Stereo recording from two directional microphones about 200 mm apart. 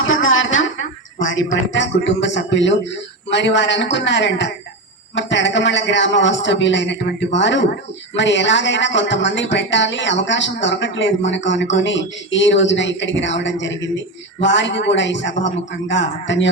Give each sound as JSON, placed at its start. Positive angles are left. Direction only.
{"t": 0.0, "sound": "a woman's voice", "side_deg": 75}